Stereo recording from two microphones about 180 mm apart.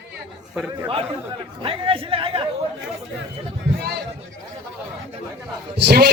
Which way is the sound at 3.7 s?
60° right (ahead or behind).